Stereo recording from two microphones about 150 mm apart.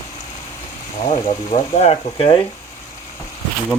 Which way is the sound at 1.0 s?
45° left (ahead or behind).